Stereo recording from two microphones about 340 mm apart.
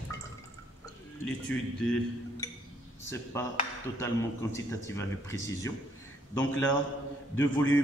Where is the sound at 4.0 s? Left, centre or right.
Centre.